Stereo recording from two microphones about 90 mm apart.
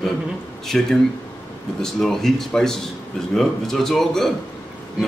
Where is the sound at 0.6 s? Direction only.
5° left (ahead or behind).